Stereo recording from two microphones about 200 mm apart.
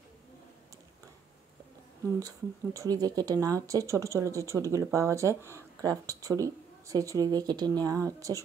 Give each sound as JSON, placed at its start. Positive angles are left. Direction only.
{"t": 2.1, "sound": "speech", "side_deg": -15}